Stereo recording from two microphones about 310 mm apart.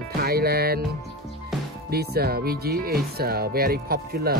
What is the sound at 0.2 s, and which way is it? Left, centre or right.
Music, right.